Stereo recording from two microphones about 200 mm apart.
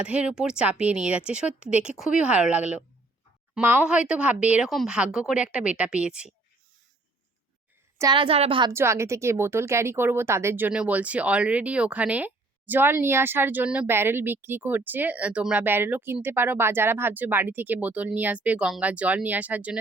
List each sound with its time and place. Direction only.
0.0 s speech: 5° right (ahead or behind)
7.9 s a woman's voice: 20° right (ahead or behind)
8.7 s a woman's voice: 15° right (ahead or behind)